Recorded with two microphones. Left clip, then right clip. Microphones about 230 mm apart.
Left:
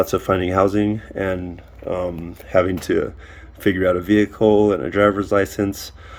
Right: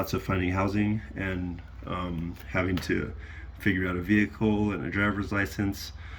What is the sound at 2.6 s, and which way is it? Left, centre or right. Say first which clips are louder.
Speech: left 11 dB; left.